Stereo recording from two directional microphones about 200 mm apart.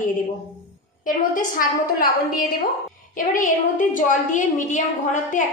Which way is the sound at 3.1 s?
40° left (ahead or behind).